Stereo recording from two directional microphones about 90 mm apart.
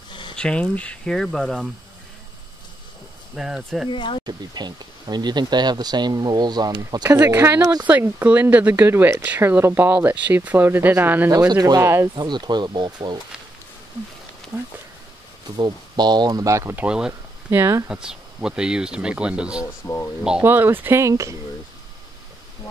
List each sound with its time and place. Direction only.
0.4 s speech: 10° left (ahead or behind)
3.3 s speech: 5° right (ahead or behind)
3.9 s speech: 65° left (ahead or behind)
4.3 s speech: 50° right (ahead or behind)
7.1 s speech: 30° right (ahead or behind)
11.2 s speech: 40° right (ahead or behind)
11.8 s speech: 30° right (ahead or behind)
12.2 s speech: 55° right (ahead or behind)
15.5 s speech: 55° right (ahead or behind); by 16.7 s 35° right (ahead or behind)
16.7 s speech: 10° right (ahead or behind)
17.5 s speech: 30° right (ahead or behind)
17.8 s speech: 10° right (ahead or behind)
19.6 s speech: 30° left (ahead or behind)
20.4 s speech: 25° right (ahead or behind)